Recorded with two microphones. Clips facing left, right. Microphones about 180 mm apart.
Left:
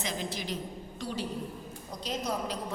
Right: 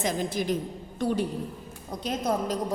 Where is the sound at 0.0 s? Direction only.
50° right (ahead or behind).